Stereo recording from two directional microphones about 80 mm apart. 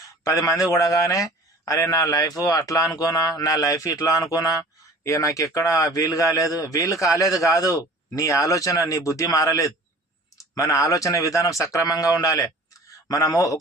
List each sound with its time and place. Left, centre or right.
0.0 s a man's voice: left